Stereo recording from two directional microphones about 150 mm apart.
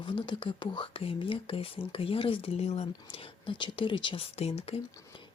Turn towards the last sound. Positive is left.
turn(degrees=45)  # may be behind; listen again after turning